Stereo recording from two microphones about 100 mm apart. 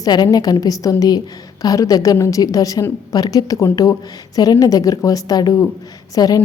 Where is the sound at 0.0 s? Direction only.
40° left (ahead or behind).